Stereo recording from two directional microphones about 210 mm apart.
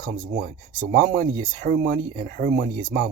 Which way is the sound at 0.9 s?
50° right (ahead or behind).